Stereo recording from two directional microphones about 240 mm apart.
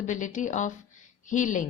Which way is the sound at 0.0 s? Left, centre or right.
Left.